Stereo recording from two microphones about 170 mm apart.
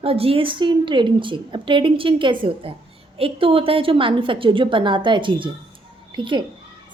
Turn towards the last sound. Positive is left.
turn(degrees=-30)  # may be behind; listen again after turning